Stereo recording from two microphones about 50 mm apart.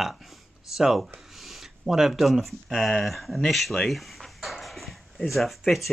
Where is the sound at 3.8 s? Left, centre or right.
Centre.